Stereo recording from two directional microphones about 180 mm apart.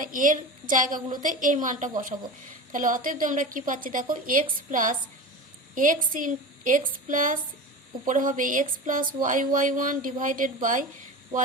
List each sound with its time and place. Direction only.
0.0 s a woman's voice: 45° right (ahead or behind)